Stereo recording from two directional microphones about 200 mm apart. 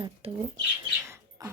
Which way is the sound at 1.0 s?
15° right (ahead or behind).